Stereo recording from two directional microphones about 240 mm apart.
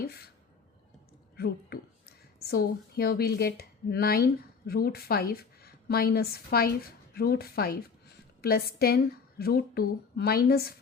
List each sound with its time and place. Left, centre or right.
1.4 s speech: left